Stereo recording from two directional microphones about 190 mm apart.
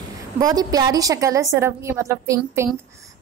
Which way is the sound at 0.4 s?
20° right (ahead or behind).